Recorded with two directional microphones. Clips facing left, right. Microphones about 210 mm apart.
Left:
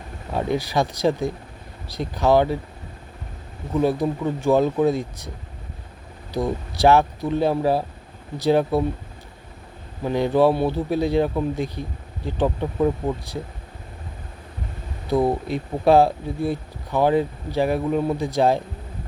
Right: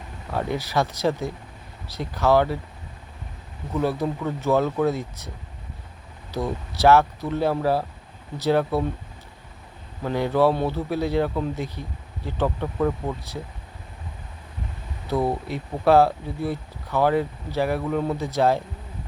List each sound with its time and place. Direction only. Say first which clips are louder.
0.3 s speech: left 2 dB; 15° left (ahead or behind)
3.8 s speech: left 4 dB; 15° left (ahead or behind)
6.3 s speech: left 3 dB; 15° left (ahead or behind)
10.0 s speech: left 2 dB; 15° left (ahead or behind)
15.0 s speech: left 4 dB; 15° left (ahead or behind)